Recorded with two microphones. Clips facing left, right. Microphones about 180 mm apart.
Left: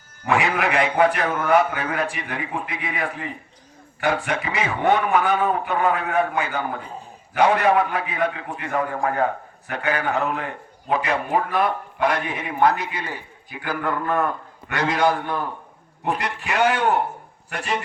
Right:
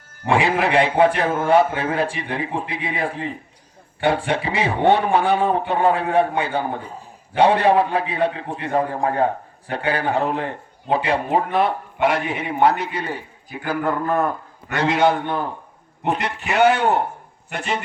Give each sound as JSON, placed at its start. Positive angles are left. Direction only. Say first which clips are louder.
{"t": 0.3, "sound": "a man's voice", "louder": "right 3 dB", "side_deg": -30}